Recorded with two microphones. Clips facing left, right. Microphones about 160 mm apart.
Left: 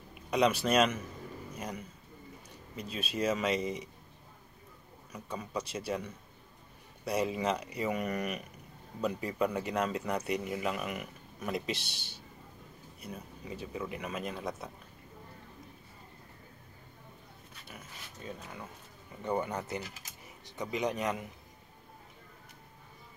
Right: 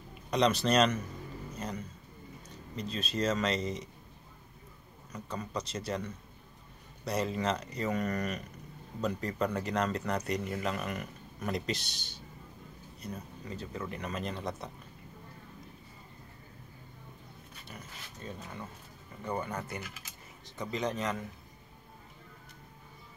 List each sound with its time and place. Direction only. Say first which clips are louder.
0.1 s a man's voice: even; 10° left (ahead or behind)
2.7 s speech: right 2 dB; 10° left (ahead or behind)
5.1 s speech: even; 10° left (ahead or behind)
17.6 s dog: right 1 dB; 5° left (ahead or behind)
19.2 s speech: left 3 dB; 20° left (ahead or behind)
19.8 s speech: left 1 dB; 40° left (ahead or behind)
20.7 s speech: left 1 dB; 15° left (ahead or behind)